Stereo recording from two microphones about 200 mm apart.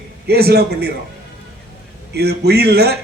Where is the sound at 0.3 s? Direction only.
50° right (ahead or behind).